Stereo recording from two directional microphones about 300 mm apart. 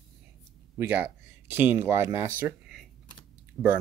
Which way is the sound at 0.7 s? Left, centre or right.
Centre.